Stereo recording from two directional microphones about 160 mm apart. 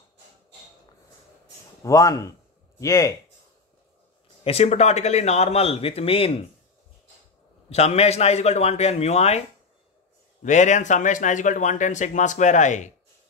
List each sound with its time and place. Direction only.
1.8 s a man's voice: 20° left (ahead or behind)
4.5 s speech: 40° left (ahead or behind)
7.7 s speech: 40° left (ahead or behind)
10.4 s speech: 50° left (ahead or behind)